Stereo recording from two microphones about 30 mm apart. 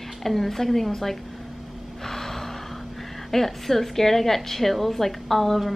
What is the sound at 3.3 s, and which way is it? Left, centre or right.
A woman's voice, centre.